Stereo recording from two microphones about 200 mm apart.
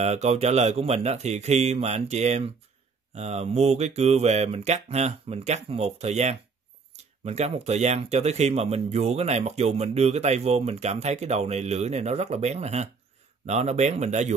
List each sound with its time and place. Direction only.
0.0 s speech: 35° right (ahead or behind)